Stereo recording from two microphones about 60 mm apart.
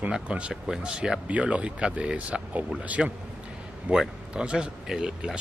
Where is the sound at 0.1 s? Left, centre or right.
Centre.